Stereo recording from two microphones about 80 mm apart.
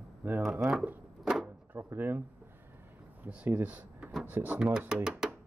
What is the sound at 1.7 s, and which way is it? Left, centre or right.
Speech, right.